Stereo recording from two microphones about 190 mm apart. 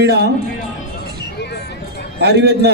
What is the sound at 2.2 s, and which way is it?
Speech, 60° right (ahead or behind).